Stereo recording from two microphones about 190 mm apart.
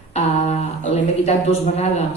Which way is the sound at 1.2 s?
35° left (ahead or behind).